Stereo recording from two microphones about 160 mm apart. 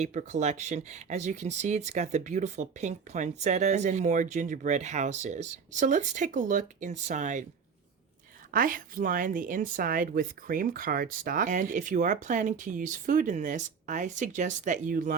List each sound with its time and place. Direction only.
0.0 s speech: 50° right (ahead or behind)
8.5 s a woman's voice: 60° right (ahead or behind)